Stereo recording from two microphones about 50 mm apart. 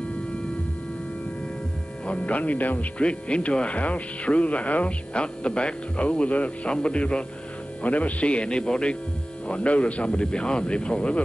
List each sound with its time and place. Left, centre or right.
2.0 s speech: left
3.0 s speech: left